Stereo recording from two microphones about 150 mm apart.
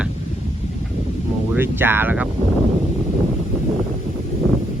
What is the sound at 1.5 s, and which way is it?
Speech, 15° right (ahead or behind).